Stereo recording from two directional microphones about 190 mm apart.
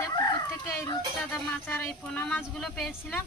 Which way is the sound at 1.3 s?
10° left (ahead or behind).